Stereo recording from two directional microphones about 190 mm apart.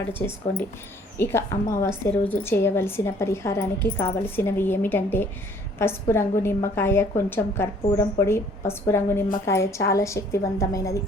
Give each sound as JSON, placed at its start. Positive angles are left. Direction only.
{"t": 1.1, "sound": "a woman's voice", "side_deg": 15}